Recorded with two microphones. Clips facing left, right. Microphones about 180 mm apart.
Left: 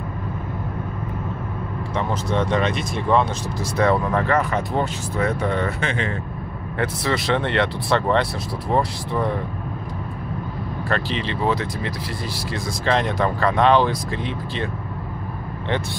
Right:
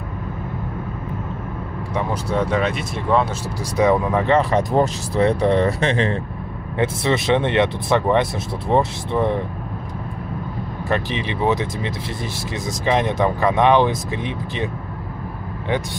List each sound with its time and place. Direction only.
2.0 s speech: 10° right (ahead or behind)
3.7 s speech: 15° right (ahead or behind)
4.4 s speech: 35° right (ahead or behind)
6.8 s speech: 20° right (ahead or behind)
10.9 s speech: 15° right (ahead or behind)